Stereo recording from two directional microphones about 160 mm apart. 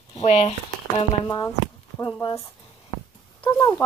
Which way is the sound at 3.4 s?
15° left (ahead or behind).